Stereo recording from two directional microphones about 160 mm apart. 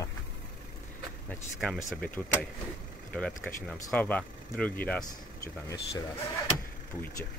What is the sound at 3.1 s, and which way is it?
Speech, 5° left (ahead or behind).